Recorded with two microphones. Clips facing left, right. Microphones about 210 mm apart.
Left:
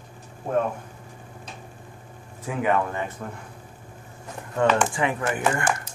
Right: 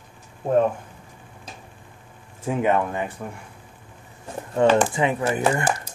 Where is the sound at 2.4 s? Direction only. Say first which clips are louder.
Right 3 dB; 20° right (ahead or behind).